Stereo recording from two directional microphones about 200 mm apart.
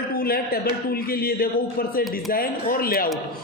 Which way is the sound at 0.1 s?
50° left (ahead or behind).